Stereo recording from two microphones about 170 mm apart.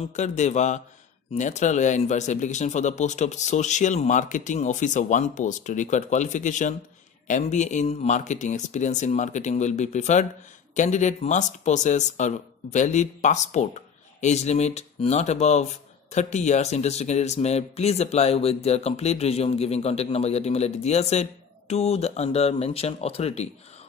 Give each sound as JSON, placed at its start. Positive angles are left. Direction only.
{"t": 0.1, "sound": "speech", "side_deg": 45}